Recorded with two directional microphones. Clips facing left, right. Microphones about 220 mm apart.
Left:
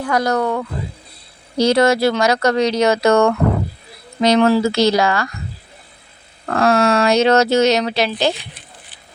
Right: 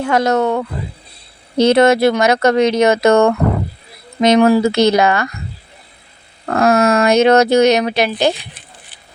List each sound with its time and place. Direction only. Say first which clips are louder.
0.0 s speech: right 3 dB; 25° right (ahead or behind)
6.4 s speech: right 2 dB; 20° right (ahead or behind)